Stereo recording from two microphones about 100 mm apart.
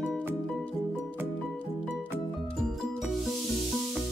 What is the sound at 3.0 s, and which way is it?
Music, centre (ahead or behind).